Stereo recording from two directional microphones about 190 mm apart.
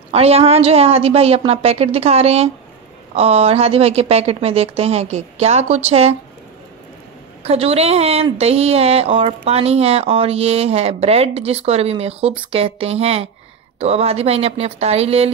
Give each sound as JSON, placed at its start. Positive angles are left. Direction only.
{"t": 0.1, "sound": "a woman's voice", "side_deg": -30}
{"t": 7.4, "sound": "a woman's voice", "side_deg": -30}